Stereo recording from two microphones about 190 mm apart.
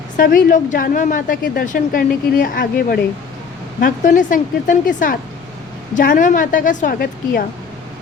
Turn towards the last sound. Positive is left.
turn(degrees=45)  # may be behind; listen again after turning